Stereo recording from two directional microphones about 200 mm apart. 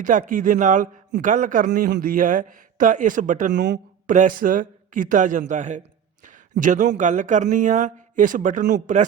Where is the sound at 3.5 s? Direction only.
60° right (ahead or behind).